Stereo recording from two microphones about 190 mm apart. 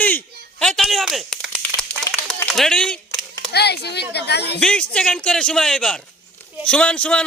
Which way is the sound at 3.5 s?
60° left (ahead or behind).